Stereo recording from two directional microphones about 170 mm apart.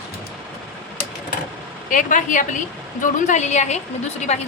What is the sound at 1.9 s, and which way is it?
A woman's voice, 50° left (ahead or behind).